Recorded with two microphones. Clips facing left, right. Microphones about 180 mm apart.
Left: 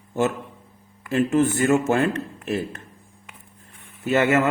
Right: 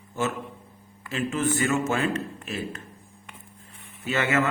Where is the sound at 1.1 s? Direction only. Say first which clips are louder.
Left 7 dB; 50° left (ahead or behind).